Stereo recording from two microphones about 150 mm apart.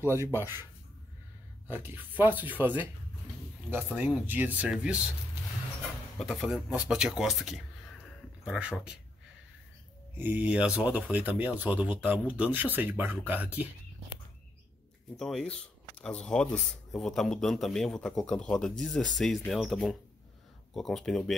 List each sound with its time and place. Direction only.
0.2 s speech: 15° right (ahead or behind)
1.7 s speech: 15° right (ahead or behind)
6.1 s a man's voice: centre (ahead or behind)
10.1 s speech: 10° right (ahead or behind)
15.1 s a man's voice: 5° left (ahead or behind)